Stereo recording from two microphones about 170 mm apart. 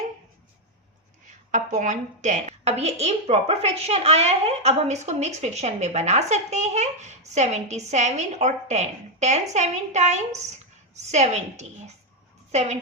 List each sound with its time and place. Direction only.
1.5 s a woman's voice: 50° right (ahead or behind)